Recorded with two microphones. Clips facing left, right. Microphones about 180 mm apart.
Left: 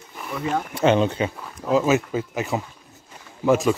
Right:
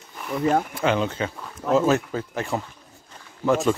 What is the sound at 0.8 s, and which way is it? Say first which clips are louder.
Speech: left 4 dB; 20° left (ahead or behind).